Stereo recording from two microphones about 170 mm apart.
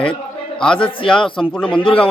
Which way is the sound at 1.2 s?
30° left (ahead or behind).